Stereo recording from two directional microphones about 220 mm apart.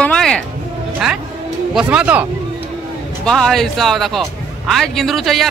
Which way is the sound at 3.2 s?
5° left (ahead or behind).